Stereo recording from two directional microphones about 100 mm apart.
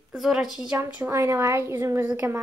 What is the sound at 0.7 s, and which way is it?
Speech, 15° right (ahead or behind).